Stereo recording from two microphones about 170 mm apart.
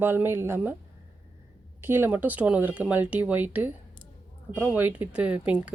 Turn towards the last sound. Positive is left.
turn(degrees=-10)  # may be behind; listen again after turning